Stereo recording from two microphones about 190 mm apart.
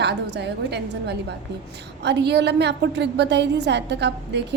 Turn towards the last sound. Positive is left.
turn(degrees=-65)  # may be behind; listen again after turning